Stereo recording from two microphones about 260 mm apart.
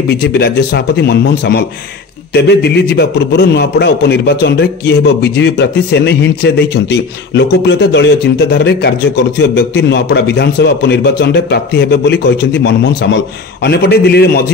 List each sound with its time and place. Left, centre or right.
0.1 s a man's voice: left